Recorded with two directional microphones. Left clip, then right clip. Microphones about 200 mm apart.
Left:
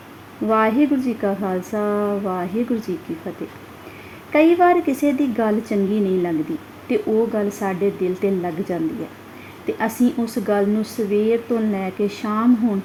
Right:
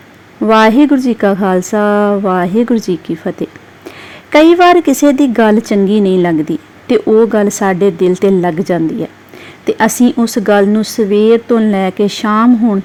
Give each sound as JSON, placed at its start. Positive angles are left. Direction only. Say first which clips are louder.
{"t": 0.4, "sound": "a woman's voice", "louder": "right 10 dB", "side_deg": -40}